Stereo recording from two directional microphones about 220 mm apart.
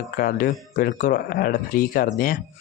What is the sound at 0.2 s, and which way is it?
Speech, 40° left (ahead or behind).